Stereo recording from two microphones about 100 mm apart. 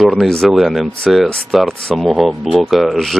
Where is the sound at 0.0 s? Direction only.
5° left (ahead or behind).